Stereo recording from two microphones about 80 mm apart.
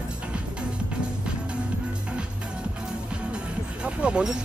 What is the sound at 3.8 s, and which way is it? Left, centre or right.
Speech, centre.